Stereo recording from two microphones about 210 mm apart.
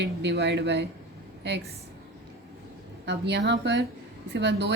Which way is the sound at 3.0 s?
55° right (ahead or behind).